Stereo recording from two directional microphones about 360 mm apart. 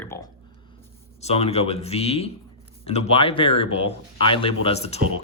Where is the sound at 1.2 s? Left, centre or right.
Centre.